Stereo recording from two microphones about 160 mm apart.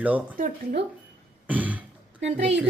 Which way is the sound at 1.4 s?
10° right (ahead or behind).